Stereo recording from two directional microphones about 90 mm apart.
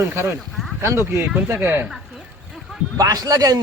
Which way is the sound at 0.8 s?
30° right (ahead or behind).